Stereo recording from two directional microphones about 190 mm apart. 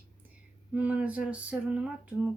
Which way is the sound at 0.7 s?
10° right (ahead or behind).